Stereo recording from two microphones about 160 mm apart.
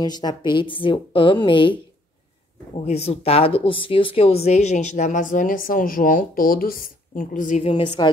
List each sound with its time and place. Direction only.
0.0 s a woman's voice: 25° left (ahead or behind)